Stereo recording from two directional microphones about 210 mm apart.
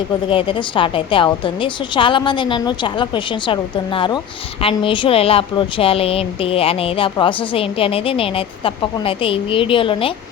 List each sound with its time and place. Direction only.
0.3 s a woman's voice: 25° left (ahead or behind)